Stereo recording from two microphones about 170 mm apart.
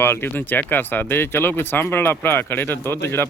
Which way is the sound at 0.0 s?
15° left (ahead or behind).